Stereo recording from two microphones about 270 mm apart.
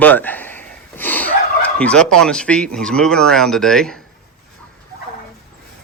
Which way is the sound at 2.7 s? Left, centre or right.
Centre.